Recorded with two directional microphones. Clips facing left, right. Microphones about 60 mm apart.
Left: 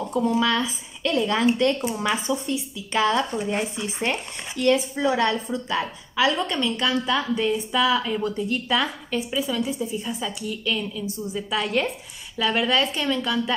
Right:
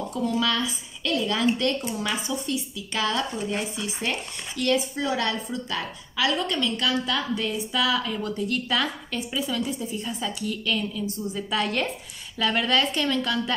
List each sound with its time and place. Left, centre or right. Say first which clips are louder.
0.1 s a woman's voice: left 4 dB; left